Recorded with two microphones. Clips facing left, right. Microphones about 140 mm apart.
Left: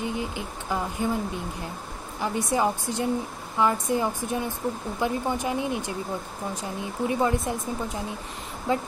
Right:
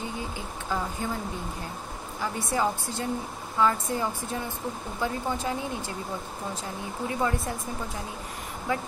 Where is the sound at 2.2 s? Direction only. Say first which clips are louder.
Left 3 dB; 20° left (ahead or behind).